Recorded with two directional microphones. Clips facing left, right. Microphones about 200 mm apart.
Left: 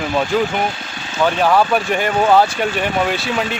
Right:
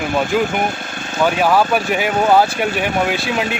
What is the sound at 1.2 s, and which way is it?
Speech, 5° right (ahead or behind).